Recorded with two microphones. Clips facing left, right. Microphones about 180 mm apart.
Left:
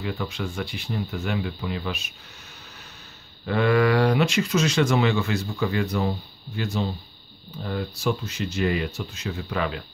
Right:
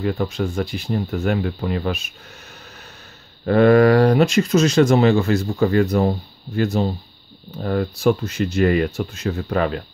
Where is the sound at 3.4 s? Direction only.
45° right (ahead or behind).